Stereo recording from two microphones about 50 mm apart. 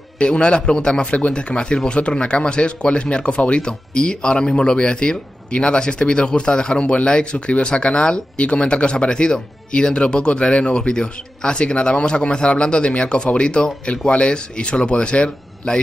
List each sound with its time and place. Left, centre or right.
0.2 s speech: left